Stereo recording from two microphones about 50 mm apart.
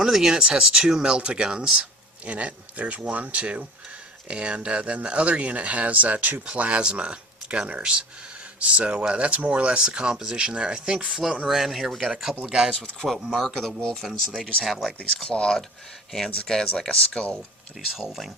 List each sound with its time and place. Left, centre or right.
0.0 s speech: centre
12.1 s speech: centre
13.4 s speech: centre
15.3 s speech: centre
16.7 s speech: centre
17.9 s speech: centre